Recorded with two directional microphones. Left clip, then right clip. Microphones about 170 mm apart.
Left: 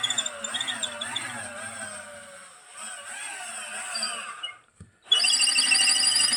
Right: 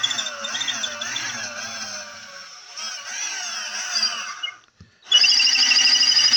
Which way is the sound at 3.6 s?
45° right (ahead or behind).